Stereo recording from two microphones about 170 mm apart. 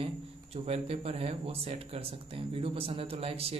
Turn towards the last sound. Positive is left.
turn(degrees=-35)  # may be behind; listen again after turning